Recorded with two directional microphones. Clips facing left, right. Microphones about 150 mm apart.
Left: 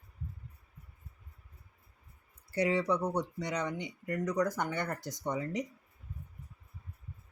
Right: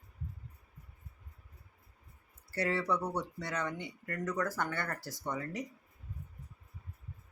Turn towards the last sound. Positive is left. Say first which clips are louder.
# left 4 dB
turn(degrees=20)  # may be behind; listen again after turning